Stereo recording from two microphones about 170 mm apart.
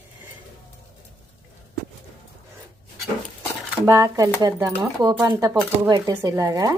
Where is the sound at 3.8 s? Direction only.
20° right (ahead or behind).